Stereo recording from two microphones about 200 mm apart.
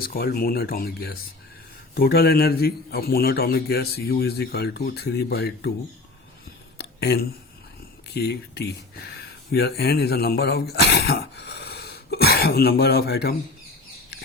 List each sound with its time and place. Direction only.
0.0 s a man's voice: 50° left (ahead or behind)
6.7 s a sound: 55° left (ahead or behind)
8.1 s speech: 55° left (ahead or behind)